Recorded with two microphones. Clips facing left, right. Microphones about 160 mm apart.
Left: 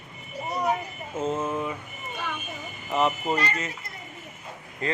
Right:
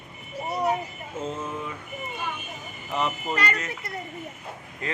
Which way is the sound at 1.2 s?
50° left (ahead or behind).